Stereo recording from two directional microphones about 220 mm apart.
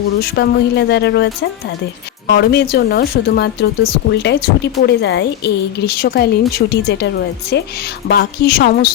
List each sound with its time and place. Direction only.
0.2 s a woman's voice: 45° left (ahead or behind)